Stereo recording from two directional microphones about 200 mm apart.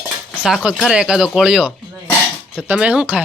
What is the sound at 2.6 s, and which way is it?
Speech, 5° right (ahead or behind).